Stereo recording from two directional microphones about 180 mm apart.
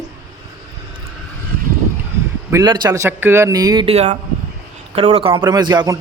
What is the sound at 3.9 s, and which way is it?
Speech, 35° right (ahead or behind).